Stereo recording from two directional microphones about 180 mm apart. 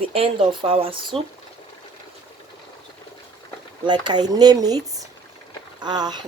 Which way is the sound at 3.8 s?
25° right (ahead or behind).